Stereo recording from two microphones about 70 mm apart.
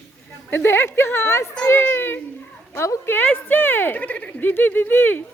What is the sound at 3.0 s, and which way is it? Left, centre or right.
A woman's voice, left.